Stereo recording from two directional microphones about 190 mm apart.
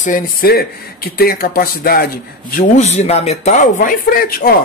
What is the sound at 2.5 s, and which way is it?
Speech, 35° left (ahead or behind).